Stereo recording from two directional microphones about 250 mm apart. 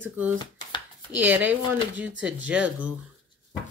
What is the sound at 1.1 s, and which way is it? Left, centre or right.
Speech, centre.